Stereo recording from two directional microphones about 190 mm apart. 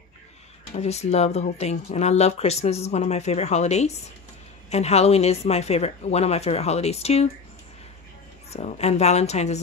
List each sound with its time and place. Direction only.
0.7 s speech: 35° left (ahead or behind)
8.5 s speech: 35° left (ahead or behind)